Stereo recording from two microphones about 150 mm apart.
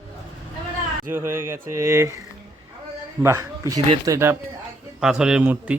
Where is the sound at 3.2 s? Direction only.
20° right (ahead or behind).